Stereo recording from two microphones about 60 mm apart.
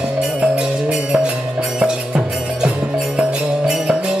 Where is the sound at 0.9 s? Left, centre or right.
Centre.